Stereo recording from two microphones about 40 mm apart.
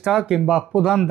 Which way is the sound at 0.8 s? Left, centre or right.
Centre.